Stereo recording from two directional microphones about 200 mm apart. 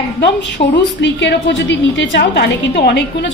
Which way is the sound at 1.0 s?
60° left (ahead or behind).